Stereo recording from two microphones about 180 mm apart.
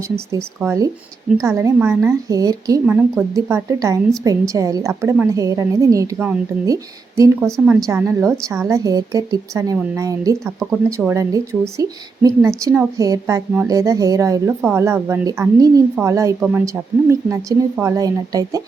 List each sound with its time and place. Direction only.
0.3 s a woman's voice: 15° right (ahead or behind)
2.8 s a woman's voice: 10° right (ahead or behind)